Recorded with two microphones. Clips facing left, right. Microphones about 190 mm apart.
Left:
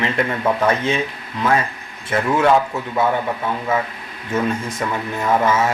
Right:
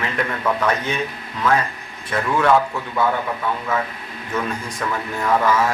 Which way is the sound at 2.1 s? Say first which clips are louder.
Left 3 dB; 25° left (ahead or behind).